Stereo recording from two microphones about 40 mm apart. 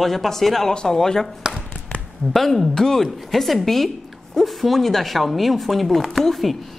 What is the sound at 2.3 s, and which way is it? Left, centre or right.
A woman's voice, centre.